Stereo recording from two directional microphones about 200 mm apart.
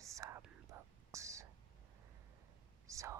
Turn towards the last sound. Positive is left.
turn(degrees=-15)  # may be behind; listen again after turning